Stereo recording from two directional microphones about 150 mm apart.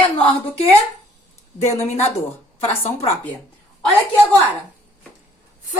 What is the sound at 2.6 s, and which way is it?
Speech, 45° left (ahead or behind).